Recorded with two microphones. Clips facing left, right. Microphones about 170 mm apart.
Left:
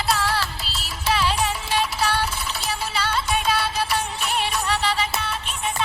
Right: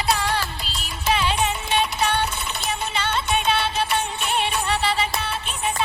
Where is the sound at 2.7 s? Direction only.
25° right (ahead or behind).